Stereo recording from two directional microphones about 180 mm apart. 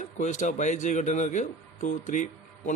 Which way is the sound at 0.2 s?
40° left (ahead or behind).